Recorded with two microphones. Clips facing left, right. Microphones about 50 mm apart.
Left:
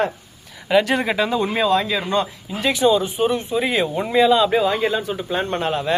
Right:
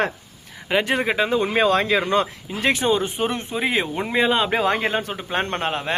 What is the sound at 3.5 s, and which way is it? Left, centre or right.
Speech, right.